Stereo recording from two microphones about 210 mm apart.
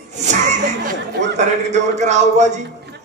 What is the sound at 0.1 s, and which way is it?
Chuckle, 35° right (ahead or behind).